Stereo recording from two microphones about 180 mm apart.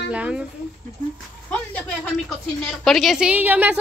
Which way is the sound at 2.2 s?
Centre (ahead or behind).